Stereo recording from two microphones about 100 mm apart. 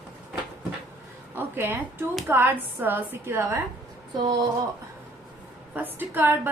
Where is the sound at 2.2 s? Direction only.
20° right (ahead or behind).